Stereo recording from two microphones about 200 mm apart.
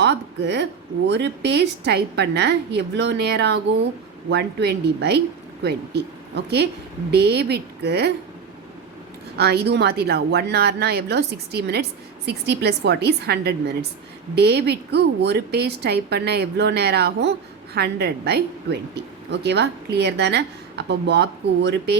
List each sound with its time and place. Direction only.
0.0 s a woman's voice: 60° right (ahead or behind)
9.4 s a woman's voice: 55° right (ahead or behind)